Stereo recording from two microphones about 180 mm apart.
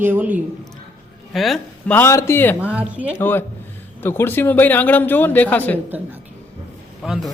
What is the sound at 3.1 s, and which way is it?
Speech, 10° left (ahead or behind).